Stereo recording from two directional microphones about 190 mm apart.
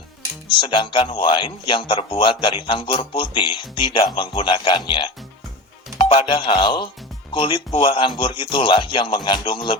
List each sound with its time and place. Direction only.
0.6 s speech: 25° left (ahead or behind)